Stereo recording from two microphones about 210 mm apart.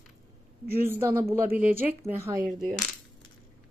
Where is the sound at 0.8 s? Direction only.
10° right (ahead or behind).